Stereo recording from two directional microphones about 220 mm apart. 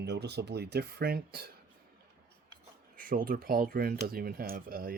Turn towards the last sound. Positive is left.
turn(degrees=-40)  # may be behind; listen again after turning